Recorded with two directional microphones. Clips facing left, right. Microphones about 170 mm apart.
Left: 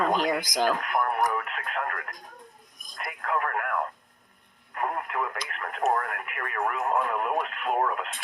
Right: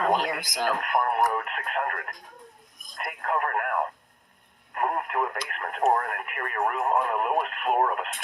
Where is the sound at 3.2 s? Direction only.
40° right (ahead or behind).